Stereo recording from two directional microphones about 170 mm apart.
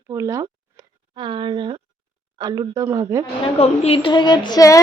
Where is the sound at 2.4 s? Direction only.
20° right (ahead or behind).